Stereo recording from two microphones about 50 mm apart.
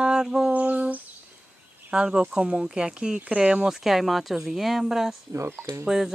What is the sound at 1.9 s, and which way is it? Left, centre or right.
Speech, centre.